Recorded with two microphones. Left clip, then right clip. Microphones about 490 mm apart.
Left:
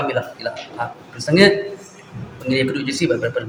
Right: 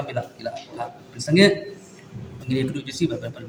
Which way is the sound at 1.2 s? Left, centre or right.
Right.